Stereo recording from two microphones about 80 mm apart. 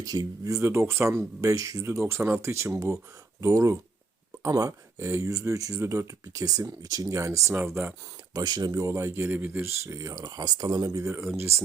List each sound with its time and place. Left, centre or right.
0.0 s speech: right
0.6 s speech: right
8.3 s speech: right
8.9 s speech: right
9.4 s speech: right
9.6 s speech: right